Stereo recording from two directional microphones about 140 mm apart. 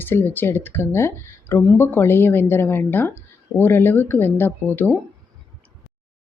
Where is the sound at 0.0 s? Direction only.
15° left (ahead or behind).